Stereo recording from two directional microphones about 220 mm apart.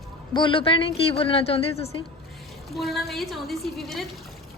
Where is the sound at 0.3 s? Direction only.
20° left (ahead or behind).